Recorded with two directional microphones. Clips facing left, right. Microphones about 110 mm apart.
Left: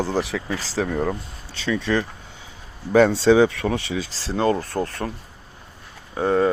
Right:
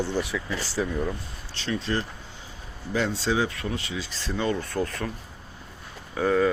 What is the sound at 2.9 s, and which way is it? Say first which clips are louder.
Speech: left 11 dB; 65° left (ahead or behind).